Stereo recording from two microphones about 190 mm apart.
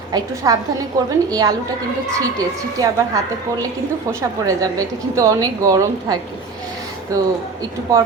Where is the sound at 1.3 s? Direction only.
20° right (ahead or behind).